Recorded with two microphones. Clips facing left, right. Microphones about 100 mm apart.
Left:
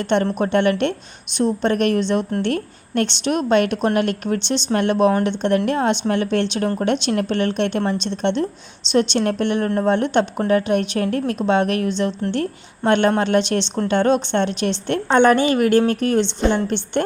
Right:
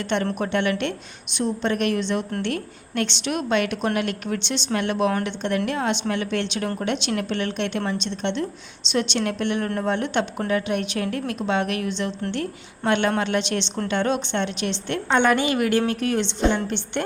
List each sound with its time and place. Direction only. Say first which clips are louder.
0.0 s a woman's voice: left 5 dB; 40° left (ahead or behind)